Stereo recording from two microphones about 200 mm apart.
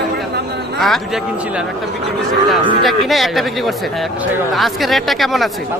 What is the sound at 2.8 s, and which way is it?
Speech, centre (ahead or behind).